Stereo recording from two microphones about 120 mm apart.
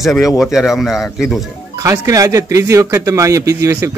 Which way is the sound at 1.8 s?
30° right (ahead or behind).